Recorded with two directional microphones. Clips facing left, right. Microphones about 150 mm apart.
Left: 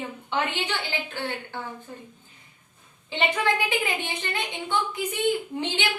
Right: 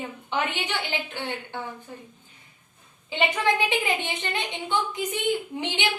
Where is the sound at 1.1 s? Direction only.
15° right (ahead or behind).